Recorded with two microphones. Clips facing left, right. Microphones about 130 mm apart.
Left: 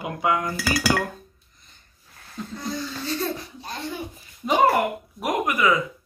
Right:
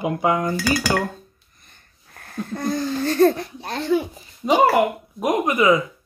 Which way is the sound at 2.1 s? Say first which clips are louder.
Right 6 dB; 55° right (ahead or behind).